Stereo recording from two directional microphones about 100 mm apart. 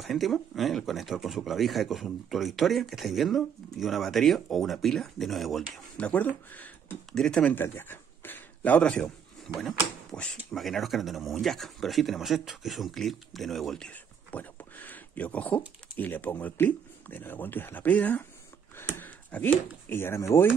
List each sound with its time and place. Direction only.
0.0 s speech: centre (ahead or behind)
5.9 s speech: 15° left (ahead or behind)
7.1 s speech: 5° left (ahead or behind)
7.5 s a man's voice: 20° left (ahead or behind)